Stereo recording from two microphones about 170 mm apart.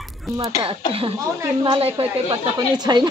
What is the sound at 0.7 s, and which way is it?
A woman's voice, 35° right (ahead or behind).